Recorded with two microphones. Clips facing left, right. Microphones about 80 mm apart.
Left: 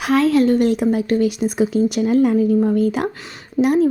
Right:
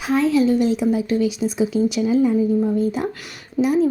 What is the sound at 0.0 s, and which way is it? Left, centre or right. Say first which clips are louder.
Speech: left 2 dB; left.